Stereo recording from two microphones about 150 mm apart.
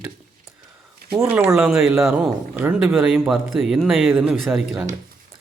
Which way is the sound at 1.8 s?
20° right (ahead or behind).